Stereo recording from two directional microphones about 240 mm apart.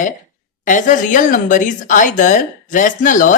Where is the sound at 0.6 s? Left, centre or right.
Left.